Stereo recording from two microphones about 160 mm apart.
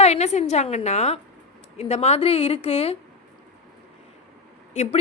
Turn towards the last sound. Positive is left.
turn(degrees=45)  # may be behind; listen again after turning